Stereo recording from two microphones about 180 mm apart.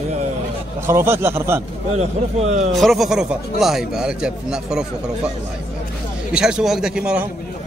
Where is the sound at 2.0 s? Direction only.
40° right (ahead or behind).